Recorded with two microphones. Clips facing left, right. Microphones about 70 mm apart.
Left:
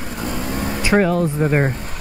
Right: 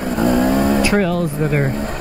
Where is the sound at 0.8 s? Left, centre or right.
Left.